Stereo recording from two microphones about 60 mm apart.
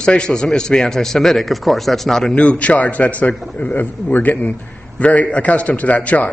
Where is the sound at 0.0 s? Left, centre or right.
Centre.